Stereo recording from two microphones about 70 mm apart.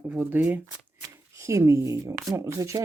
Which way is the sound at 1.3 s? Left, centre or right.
Right.